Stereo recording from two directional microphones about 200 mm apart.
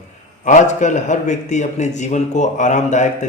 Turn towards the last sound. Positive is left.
turn(degrees=35)  # may be behind; listen again after turning